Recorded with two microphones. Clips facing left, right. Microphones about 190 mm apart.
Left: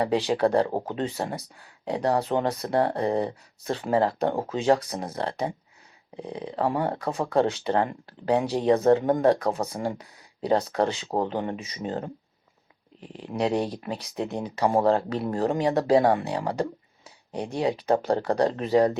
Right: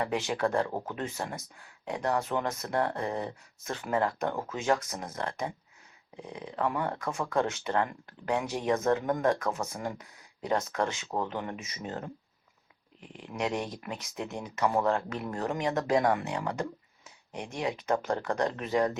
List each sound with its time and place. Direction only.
0.0 s speech: 35° left (ahead or behind)